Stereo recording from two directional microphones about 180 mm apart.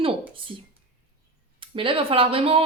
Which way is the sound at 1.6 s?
30° right (ahead or behind).